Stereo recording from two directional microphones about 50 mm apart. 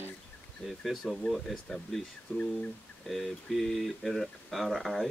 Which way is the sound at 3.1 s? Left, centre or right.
Centre.